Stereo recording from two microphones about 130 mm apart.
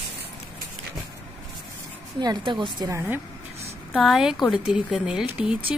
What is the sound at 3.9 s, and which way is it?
A woman's voice, 5° right (ahead or behind).